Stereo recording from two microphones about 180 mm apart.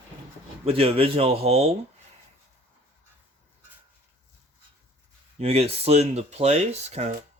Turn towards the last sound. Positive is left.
turn(degrees=-40)  # may be behind; listen again after turning